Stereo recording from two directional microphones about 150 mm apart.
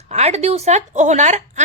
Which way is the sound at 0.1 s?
45° right (ahead or behind).